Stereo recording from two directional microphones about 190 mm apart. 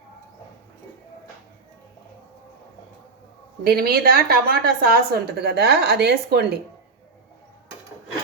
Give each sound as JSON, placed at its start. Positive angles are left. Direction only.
{"t": 3.6, "sound": "a woman's voice", "side_deg": -55}